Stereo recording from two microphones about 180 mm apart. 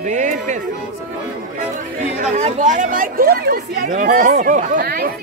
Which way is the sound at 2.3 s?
40° right (ahead or behind).